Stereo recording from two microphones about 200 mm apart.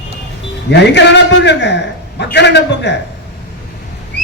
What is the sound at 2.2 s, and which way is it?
Speech, 60° left (ahead or behind).